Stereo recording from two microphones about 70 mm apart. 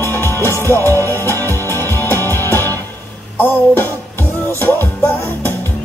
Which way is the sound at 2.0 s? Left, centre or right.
Left.